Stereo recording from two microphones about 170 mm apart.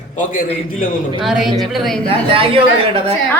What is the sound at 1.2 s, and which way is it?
Speech, centre (ahead or behind).